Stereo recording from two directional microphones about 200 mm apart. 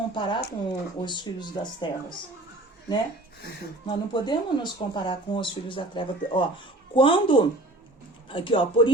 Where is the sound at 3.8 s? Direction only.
20° left (ahead or behind).